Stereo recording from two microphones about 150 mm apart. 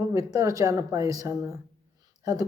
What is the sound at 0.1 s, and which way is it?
Speech, 20° right (ahead or behind).